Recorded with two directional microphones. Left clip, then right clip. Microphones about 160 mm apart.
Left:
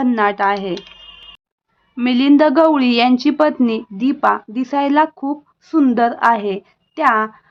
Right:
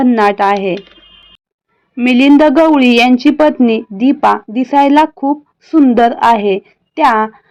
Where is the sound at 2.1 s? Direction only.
20° right (ahead or behind).